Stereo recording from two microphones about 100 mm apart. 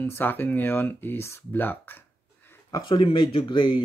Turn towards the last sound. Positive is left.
turn(degrees=50)  # may be behind; listen again after turning